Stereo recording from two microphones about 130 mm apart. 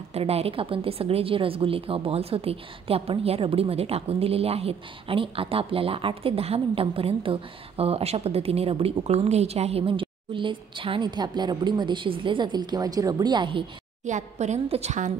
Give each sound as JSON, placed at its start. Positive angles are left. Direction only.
{"t": 0.1, "sound": "a woman's voice", "side_deg": -50}
{"t": 14.0, "sound": "a woman's voice", "side_deg": -65}